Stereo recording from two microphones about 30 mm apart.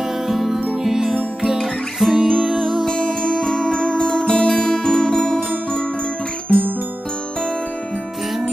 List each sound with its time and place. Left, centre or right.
0.3 s music: centre
1.6 s music: centre
3.7 s music: left